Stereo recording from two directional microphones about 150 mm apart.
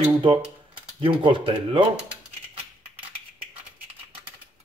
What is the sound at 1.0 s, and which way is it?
Speech, 35° right (ahead or behind).